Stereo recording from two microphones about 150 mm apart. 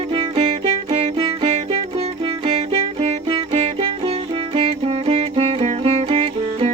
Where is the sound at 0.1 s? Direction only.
40° right (ahead or behind).